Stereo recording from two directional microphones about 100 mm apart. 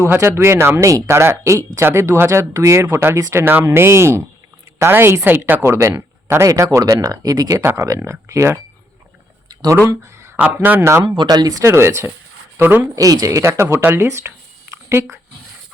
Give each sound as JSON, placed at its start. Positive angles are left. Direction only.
{"t": 0.0, "sound": "speech", "side_deg": -25}
{"t": 9.5, "sound": "a sound", "side_deg": -45}
{"t": 10.2, "sound": "speech", "side_deg": -20}
{"t": 11.2, "sound": "speech", "side_deg": -45}
{"t": 11.6, "sound": "speech", "side_deg": -25}
{"t": 13.0, "sound": "speech", "side_deg": -35}